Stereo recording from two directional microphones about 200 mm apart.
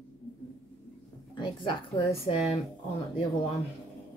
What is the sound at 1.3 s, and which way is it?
A woman's voice, 25° left (ahead or behind).